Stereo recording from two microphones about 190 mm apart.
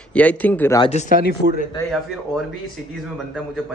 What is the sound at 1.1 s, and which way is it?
Speech, 55° left (ahead or behind).